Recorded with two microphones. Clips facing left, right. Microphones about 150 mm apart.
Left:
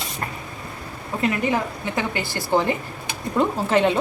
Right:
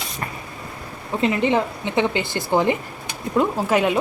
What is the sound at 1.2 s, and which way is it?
A woman's voice, 25° right (ahead or behind).